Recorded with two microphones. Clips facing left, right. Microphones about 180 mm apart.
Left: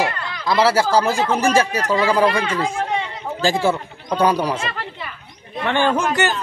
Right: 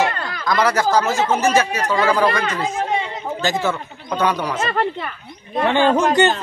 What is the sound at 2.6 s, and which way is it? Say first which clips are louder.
Chatter: right 1 dB; 20° right (ahead or behind).